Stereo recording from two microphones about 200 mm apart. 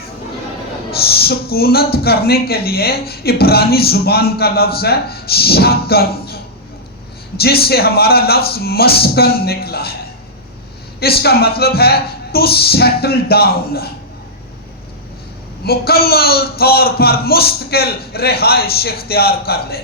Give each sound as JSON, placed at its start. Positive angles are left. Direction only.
{"t": 0.9, "sound": "speech", "side_deg": 50}
{"t": 11.0, "sound": "speech", "side_deg": 50}
{"t": 15.6, "sound": "speech", "side_deg": 50}